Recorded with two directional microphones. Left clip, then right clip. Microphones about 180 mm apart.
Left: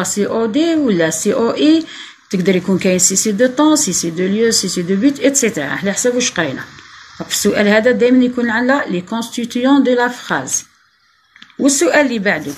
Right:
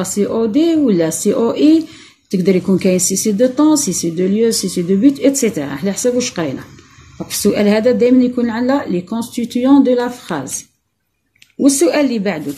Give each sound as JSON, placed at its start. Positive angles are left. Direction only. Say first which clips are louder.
{"t": 0.0, "sound": "speech", "louder": "even", "side_deg": -15}
{"t": 11.6, "sound": "speech", "louder": "left 1 dB", "side_deg": -15}